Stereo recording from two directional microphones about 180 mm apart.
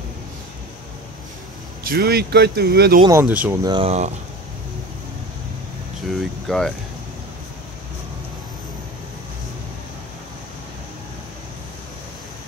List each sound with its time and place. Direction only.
1.9 s speech: 60° right (ahead or behind)
3.1 s speech: 10° right (ahead or behind)
3.6 s speech: 30° right (ahead or behind)
6.0 s speech: centre (ahead or behind)